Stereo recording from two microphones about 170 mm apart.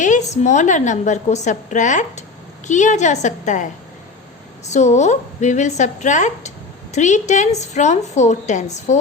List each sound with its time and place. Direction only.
0.0 s a woman's voice: 45° left (ahead or behind)
4.7 s a woman's voice: 45° left (ahead or behind)